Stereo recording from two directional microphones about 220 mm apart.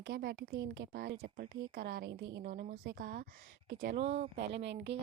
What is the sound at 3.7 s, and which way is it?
Speech, 55° right (ahead or behind).